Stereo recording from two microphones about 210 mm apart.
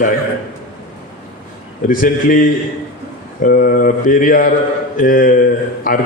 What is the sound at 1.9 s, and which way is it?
A man's voice, 40° left (ahead or behind).